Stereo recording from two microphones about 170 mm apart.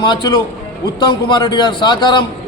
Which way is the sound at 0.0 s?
25° left (ahead or behind).